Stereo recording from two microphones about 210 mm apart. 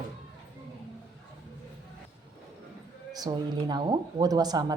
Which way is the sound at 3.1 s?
20° right (ahead or behind).